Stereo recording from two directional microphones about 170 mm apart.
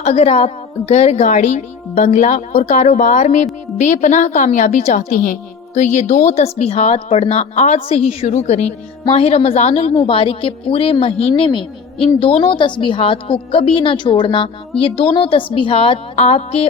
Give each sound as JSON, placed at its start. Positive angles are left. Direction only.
{"t": 0.0, "sound": "a woman's voice", "side_deg": 40}